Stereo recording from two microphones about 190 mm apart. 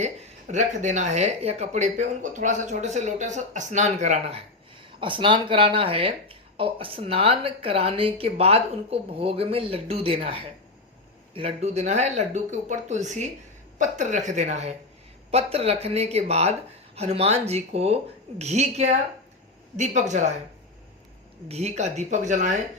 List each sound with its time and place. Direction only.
0.0 s speech: 35° right (ahead or behind)
21.4 s speech: 35° right (ahead or behind)